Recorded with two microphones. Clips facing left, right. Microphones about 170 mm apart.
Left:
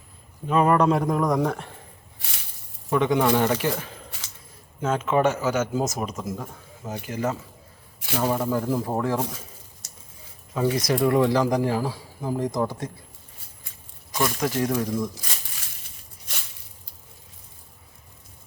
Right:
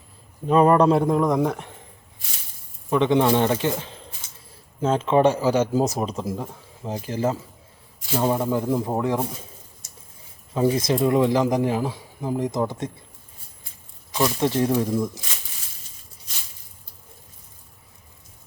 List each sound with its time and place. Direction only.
0.4 s a man's voice: 30° right (ahead or behind)
2.9 s a man's voice: 25° right (ahead or behind)
8.2 s speech: 15° right (ahead or behind)
10.5 s speech: 25° right (ahead or behind)
14.2 s speech: 25° right (ahead or behind)